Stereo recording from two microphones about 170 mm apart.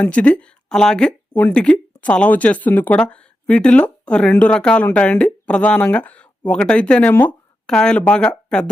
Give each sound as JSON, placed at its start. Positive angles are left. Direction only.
{"t": 0.0, "sound": "speech", "side_deg": 5}